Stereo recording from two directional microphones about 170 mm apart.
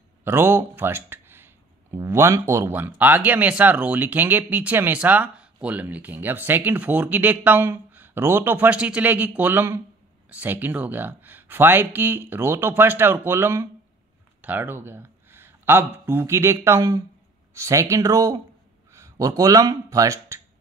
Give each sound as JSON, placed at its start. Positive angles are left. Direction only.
{"t": 0.2, "sound": "speech", "side_deg": -15}